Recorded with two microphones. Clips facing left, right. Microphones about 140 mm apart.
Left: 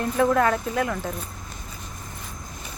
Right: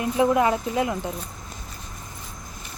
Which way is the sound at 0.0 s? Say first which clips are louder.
Even; 15° right (ahead or behind).